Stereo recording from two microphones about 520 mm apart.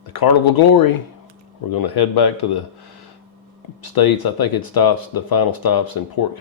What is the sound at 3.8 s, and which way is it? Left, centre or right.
Speech, left.